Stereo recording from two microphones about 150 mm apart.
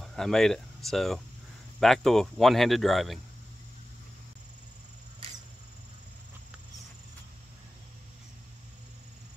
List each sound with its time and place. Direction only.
0.0 s speech: centre (ahead or behind)